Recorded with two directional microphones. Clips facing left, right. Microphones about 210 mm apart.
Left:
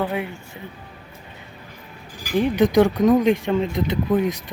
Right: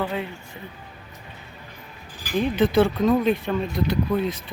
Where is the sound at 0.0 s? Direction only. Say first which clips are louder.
Left 3 dB; 15° left (ahead or behind).